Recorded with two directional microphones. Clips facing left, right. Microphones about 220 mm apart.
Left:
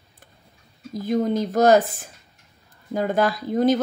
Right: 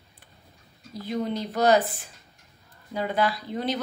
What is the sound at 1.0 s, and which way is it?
A woman's voice, 45° left (ahead or behind).